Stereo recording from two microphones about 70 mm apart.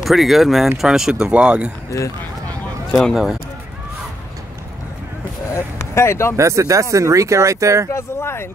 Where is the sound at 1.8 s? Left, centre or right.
Left.